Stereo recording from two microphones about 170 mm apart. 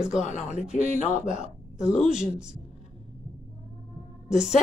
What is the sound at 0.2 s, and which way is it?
Speech, 40° left (ahead or behind).